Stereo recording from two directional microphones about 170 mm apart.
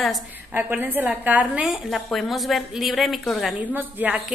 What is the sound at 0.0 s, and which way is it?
Speech, centre (ahead or behind).